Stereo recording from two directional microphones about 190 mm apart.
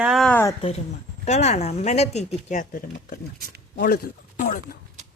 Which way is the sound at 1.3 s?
35° left (ahead or behind).